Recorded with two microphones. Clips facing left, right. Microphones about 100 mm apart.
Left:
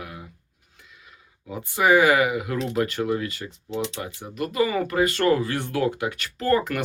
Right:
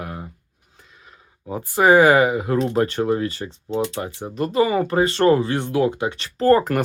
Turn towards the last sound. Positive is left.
turn(degrees=-40)  # may be behind; listen again after turning